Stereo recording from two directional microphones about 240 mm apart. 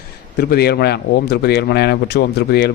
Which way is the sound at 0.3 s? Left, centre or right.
Left.